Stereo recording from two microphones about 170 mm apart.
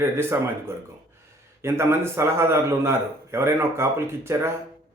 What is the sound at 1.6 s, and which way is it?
Speech, 15° right (ahead or behind).